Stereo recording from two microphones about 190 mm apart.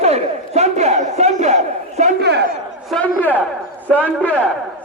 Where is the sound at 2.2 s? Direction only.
60° right (ahead or behind).